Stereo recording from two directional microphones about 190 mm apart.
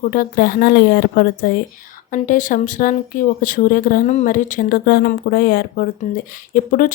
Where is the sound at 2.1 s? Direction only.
45° left (ahead or behind).